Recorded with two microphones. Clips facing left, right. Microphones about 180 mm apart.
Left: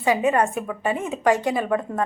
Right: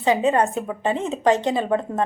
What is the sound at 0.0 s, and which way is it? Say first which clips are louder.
A woman's voice: right 1 dB; 25° right (ahead or behind).